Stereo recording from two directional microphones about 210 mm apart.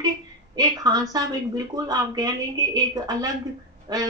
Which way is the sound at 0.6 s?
15° right (ahead or behind).